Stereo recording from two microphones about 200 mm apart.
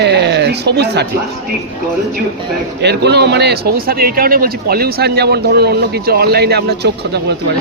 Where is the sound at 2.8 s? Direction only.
55° right (ahead or behind).